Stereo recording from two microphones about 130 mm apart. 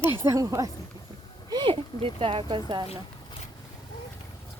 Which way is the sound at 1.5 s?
40° right (ahead or behind).